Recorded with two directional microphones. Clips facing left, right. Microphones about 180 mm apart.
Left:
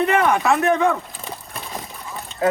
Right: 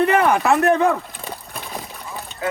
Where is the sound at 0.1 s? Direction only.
35° right (ahead or behind).